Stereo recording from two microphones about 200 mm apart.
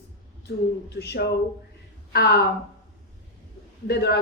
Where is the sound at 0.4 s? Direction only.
55° left (ahead or behind).